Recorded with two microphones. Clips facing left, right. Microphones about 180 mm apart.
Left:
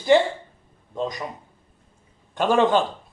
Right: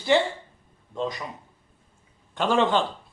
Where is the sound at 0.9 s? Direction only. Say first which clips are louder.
Left 1 dB; 20° left (ahead or behind).